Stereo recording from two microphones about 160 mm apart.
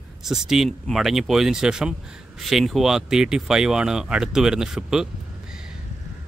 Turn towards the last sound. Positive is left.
turn(degrees=-5)  # may be behind; listen again after turning